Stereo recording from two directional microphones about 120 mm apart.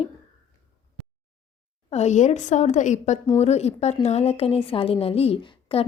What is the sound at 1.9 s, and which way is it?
A woman's voice, 70° left (ahead or behind).